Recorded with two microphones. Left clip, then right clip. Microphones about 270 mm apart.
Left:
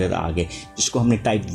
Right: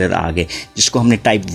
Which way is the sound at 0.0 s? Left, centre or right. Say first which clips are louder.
Right 6 dB; right.